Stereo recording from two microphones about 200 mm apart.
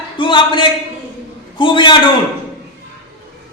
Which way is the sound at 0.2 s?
25° left (ahead or behind).